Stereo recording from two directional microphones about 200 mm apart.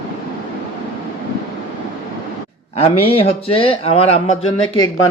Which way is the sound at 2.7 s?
30° left (ahead or behind).